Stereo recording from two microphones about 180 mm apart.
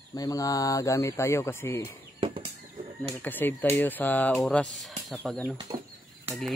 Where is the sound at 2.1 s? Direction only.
30° right (ahead or behind).